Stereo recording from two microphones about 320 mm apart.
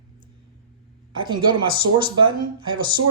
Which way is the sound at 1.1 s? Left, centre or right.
Centre.